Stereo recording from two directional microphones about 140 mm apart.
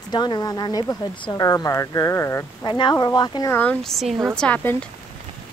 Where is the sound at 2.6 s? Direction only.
30° left (ahead or behind).